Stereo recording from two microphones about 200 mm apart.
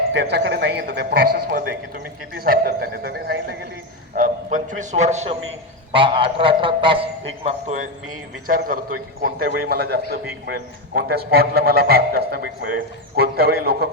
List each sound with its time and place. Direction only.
0.1 s a man's voice: 60° right (ahead or behind)
2.3 s a man's voice: 50° right (ahead or behind)
4.1 s a man's voice: 40° right (ahead or behind)
8.4 s a man's voice: 45° right (ahead or behind)